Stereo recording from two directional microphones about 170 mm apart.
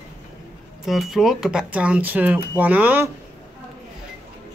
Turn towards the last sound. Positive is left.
turn(degrees=-10)  # may be behind; listen again after turning